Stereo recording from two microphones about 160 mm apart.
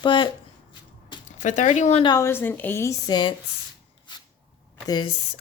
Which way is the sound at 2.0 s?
20° left (ahead or behind).